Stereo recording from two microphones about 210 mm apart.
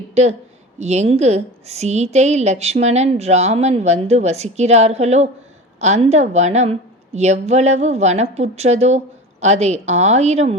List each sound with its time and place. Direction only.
0.1 s a woman's voice: 30° right (ahead or behind)